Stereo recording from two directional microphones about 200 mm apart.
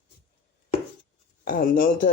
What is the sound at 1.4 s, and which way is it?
Speech, 45° left (ahead or behind).